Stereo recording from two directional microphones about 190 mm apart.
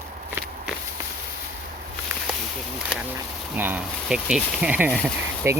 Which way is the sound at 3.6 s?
5° right (ahead or behind).